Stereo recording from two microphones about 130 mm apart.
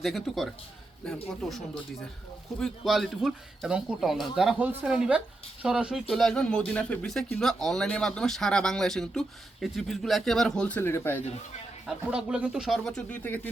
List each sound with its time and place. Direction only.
0.0 s a woman's voice: centre (ahead or behind)
10.8 s speech: 15° left (ahead or behind)
11.9 s speech: 5° right (ahead or behind); by 13.5 s 15° left (ahead or behind)